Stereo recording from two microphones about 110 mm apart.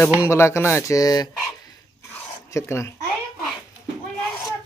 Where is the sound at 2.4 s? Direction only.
25° left (ahead or behind).